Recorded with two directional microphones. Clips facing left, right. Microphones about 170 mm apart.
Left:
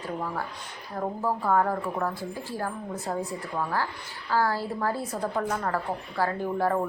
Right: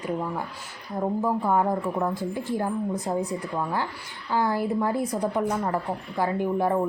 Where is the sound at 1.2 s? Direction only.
15° right (ahead or behind).